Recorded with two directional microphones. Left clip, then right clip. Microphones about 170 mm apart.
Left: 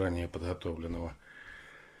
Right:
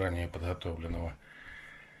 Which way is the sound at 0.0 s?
5° left (ahead or behind).